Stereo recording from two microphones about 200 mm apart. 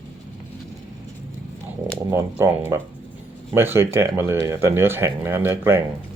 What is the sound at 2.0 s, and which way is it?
Speech, 15° right (ahead or behind).